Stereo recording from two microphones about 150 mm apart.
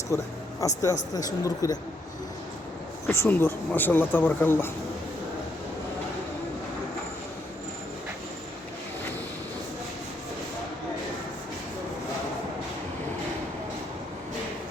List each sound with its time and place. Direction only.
0.1 s speech: 20° left (ahead or behind)
3.1 s speech: 15° left (ahead or behind)